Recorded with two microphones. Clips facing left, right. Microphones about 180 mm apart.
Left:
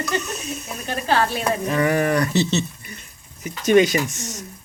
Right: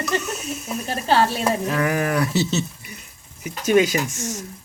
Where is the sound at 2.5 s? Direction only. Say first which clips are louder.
Left 1 dB; 5° right (ahead or behind).